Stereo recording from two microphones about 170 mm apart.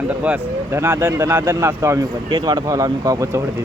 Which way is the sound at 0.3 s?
15° right (ahead or behind).